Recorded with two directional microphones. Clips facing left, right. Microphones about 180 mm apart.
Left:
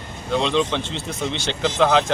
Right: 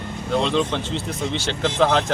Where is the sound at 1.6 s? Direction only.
Centre (ahead or behind).